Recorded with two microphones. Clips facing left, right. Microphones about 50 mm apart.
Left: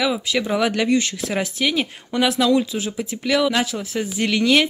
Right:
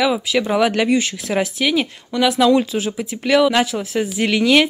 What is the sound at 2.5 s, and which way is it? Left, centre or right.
Speech, right.